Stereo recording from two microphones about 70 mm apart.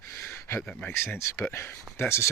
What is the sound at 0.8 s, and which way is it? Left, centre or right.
Speech, left.